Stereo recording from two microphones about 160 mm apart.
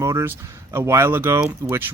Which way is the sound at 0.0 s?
15° right (ahead or behind).